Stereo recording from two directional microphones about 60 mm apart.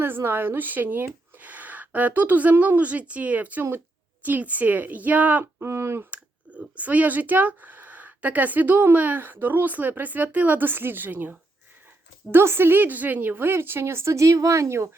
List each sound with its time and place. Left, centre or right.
0.0 s speech: right
5.6 s a woman's voice: right
6.1 s a woman's voice: right